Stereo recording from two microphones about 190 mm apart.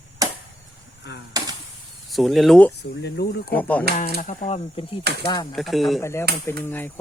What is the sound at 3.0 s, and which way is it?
Chicken, 60° left (ahead or behind).